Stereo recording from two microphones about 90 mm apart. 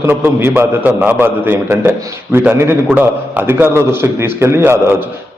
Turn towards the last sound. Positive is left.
turn(degrees=-30)  # may be behind; listen again after turning